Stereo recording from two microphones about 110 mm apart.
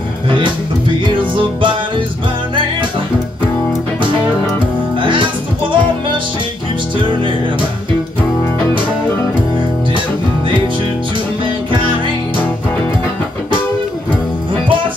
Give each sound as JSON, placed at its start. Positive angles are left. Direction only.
{"t": 0.3, "sound": "music", "side_deg": -50}
{"t": 4.6, "sound": "music", "side_deg": -50}